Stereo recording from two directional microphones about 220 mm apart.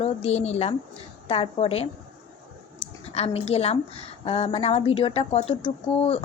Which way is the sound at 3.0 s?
30° left (ahead or behind).